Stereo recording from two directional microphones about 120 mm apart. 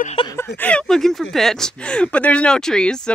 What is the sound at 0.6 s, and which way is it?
Speech, 10° left (ahead or behind).